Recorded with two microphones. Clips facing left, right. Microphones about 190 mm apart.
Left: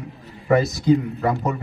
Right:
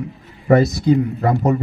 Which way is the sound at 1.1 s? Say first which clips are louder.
Right 4 dB; 40° right (ahead or behind).